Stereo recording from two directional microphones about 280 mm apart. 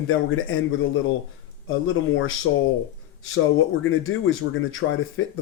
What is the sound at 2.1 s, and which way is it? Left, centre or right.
Speech, left.